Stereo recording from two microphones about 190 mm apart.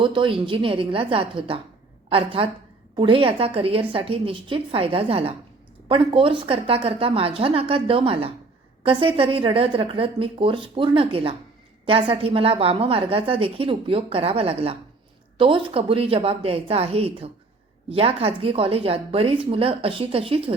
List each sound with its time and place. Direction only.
0.0 s a woman's voice: 25° right (ahead or behind)